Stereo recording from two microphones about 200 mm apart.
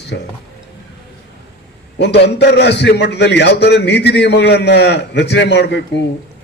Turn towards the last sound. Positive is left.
turn(degrees=60)  # may be behind; listen again after turning